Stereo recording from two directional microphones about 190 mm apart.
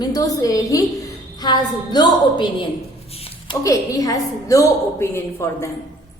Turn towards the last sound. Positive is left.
turn(degrees=15)  # may be behind; listen again after turning